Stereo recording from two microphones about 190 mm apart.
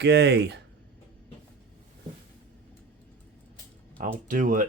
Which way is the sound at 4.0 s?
45° right (ahead or behind).